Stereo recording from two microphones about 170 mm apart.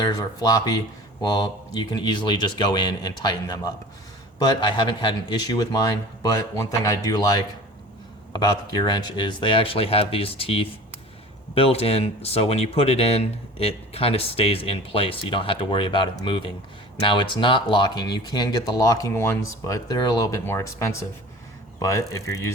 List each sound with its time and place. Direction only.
0.0 s speech: 20° left (ahead or behind)